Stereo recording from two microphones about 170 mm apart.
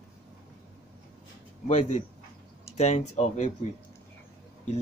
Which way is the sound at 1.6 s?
45° left (ahead or behind).